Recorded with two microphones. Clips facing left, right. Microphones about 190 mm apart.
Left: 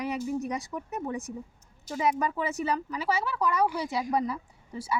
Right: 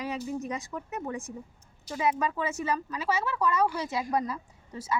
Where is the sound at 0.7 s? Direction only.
15° left (ahead or behind).